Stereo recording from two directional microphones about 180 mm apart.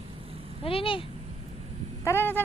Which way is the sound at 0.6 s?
30° left (ahead or behind).